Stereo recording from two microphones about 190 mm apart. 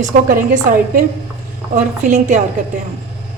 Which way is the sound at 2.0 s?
40° right (ahead or behind).